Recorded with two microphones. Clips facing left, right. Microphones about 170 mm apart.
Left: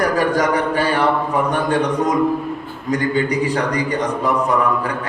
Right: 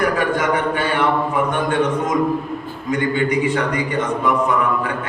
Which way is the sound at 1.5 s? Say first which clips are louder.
Left 1 dB; 35° left (ahead or behind).